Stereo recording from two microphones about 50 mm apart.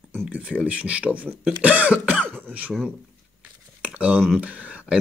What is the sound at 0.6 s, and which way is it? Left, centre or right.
Speech, right.